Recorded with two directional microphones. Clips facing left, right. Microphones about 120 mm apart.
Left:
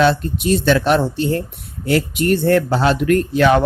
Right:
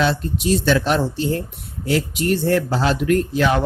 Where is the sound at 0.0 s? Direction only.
55° left (ahead or behind).